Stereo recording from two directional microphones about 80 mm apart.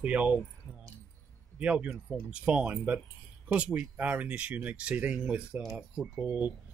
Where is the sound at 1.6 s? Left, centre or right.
Centre.